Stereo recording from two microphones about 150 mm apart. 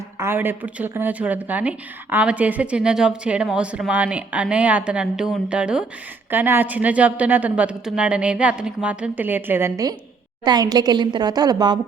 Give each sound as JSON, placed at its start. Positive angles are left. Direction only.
{"t": 0.2, "sound": "a woman's voice", "side_deg": -15}